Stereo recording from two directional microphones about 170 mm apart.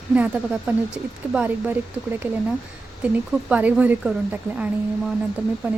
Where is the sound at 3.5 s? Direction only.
10° right (ahead or behind).